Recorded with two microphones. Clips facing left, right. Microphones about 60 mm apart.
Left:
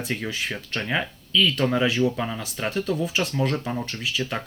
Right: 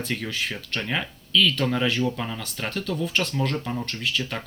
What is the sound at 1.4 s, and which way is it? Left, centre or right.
Speech, centre.